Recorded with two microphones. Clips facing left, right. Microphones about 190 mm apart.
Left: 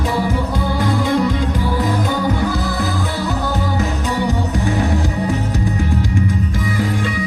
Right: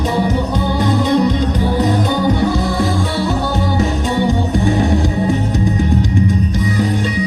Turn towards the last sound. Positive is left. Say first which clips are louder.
# right 4 dB
turn(degrees=-20)  # may be behind; listen again after turning